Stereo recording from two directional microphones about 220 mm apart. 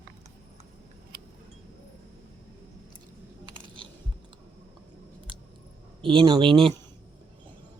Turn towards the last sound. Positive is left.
turn(degrees=-25)  # may be behind; listen again after turning